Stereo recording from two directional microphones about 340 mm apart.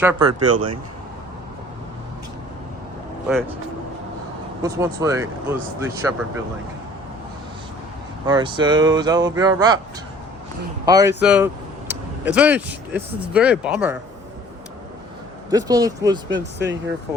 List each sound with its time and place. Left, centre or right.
0.0 s speech: centre
0.3 s speech: right
4.6 s speech: centre
8.3 s speech: centre
10.8 s speech: centre
15.4 s speech: centre
16.3 s speech: right